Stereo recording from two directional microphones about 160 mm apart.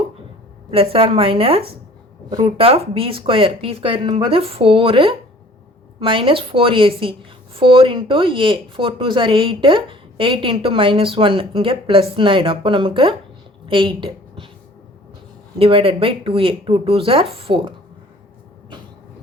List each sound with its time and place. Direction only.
0.7 s a woman's voice: 35° right (ahead or behind)
15.5 s a woman's voice: 35° right (ahead or behind)